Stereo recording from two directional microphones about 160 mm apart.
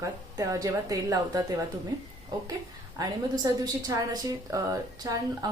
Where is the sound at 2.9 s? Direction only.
25° right (ahead or behind).